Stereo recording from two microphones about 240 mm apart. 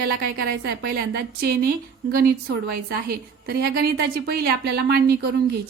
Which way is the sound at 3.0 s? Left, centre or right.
Right.